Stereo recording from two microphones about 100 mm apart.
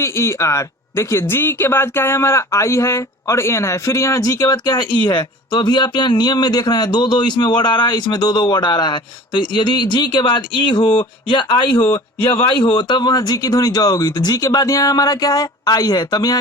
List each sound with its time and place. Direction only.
0.0 s speech: 30° left (ahead or behind)